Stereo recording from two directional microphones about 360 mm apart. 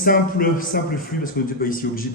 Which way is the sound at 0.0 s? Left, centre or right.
Left.